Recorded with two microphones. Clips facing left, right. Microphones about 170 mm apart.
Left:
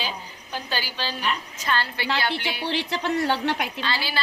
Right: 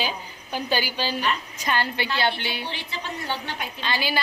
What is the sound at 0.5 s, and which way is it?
A woman's voice, 15° right (ahead or behind).